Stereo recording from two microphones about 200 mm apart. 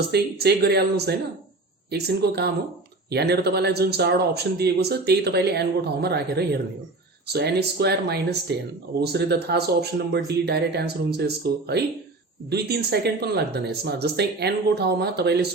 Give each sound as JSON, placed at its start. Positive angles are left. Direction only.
{"t": 0.1, "sound": "speech", "side_deg": -55}